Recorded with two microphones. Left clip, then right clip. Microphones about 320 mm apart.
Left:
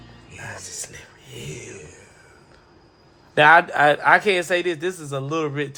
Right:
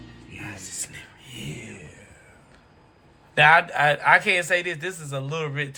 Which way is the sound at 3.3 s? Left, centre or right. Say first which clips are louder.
Left 3 dB; left.